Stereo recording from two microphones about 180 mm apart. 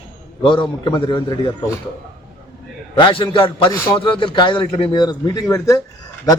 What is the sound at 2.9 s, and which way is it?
A man's voice, 25° left (ahead or behind).